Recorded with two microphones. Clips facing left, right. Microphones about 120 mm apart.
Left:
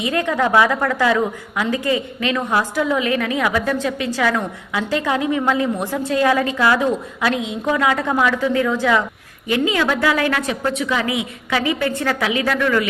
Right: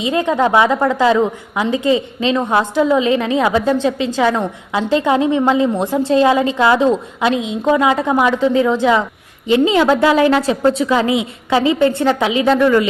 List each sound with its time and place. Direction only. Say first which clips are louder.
0.0 s a woman's voice: right 4 dB; 20° right (ahead or behind)